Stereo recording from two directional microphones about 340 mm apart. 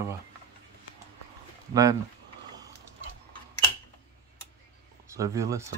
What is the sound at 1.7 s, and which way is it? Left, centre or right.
Speech, centre.